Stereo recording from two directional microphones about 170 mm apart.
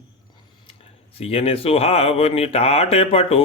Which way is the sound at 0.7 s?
35° left (ahead or behind).